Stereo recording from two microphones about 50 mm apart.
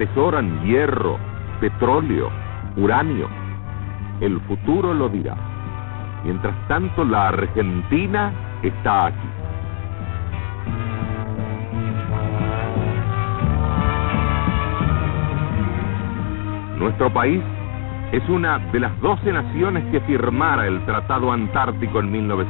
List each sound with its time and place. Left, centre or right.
0.0 s speech: right
6.2 s speech: right
10.7 s music: right
18.1 s speech: right